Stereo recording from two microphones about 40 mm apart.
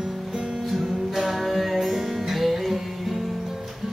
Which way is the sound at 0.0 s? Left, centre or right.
Centre.